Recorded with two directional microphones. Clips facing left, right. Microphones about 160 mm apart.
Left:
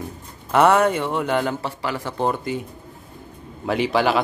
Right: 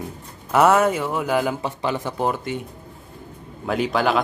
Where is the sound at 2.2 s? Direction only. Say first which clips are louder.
Left 1 dB; centre (ahead or behind).